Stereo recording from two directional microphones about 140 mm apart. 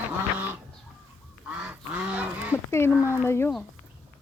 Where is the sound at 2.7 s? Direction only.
20° left (ahead or behind).